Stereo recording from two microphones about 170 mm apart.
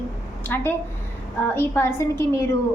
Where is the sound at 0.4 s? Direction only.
15° left (ahead or behind).